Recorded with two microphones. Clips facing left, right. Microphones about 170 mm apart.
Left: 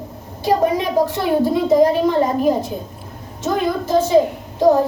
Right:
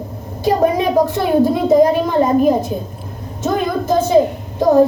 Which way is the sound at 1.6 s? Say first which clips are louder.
Right 2 dB; 50° right (ahead or behind).